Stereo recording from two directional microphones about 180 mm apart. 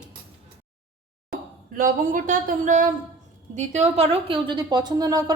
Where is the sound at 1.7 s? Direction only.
50° right (ahead or behind).